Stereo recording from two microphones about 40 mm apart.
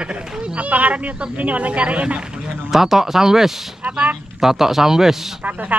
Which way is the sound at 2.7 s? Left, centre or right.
Centre.